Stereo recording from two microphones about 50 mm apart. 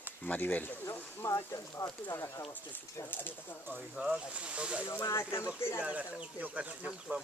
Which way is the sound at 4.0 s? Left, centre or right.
Right.